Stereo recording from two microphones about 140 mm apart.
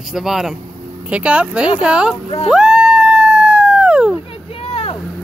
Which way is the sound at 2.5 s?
5° right (ahead or behind).